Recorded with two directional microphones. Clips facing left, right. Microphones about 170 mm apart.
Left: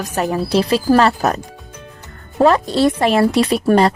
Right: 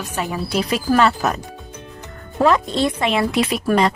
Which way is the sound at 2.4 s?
35° left (ahead or behind).